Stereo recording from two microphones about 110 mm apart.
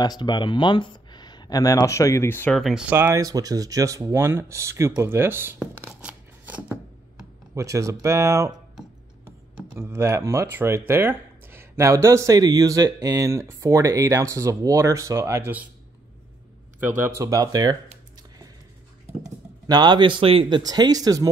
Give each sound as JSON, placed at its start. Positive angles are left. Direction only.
{"t": 0.0, "sound": "speech", "side_deg": 40}
{"t": 2.5, "sound": "speech", "side_deg": 0}
{"t": 2.9, "sound": "speech", "side_deg": -20}
{"t": 3.2, "sound": "speech", "side_deg": -35}
{"t": 5.9, "sound": "scissors", "side_deg": -10}
{"t": 7.5, "sound": "speech", "side_deg": -30}
{"t": 9.8, "sound": "speech", "side_deg": -25}
{"t": 16.8, "sound": "speech", "side_deg": -20}
{"t": 19.7, "sound": "speech", "side_deg": -40}